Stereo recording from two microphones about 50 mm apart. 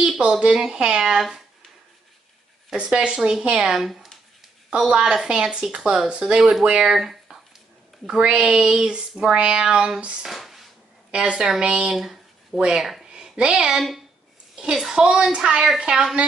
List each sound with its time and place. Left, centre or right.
0.2 s speech: centre
2.7 s speech: centre
4.6 s speech: centre
6.9 s speech: centre
8.1 s speech: centre
10.2 s a sound: centre
11.1 s a woman's voice: right
11.9 s speech: centre
13.1 s a sound: centre
13.7 s a woman's voice: centre